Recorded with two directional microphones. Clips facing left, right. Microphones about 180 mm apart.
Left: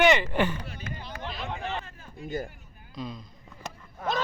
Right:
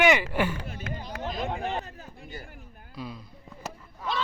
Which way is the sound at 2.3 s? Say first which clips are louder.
Left 11 dB; 45° left (ahead or behind).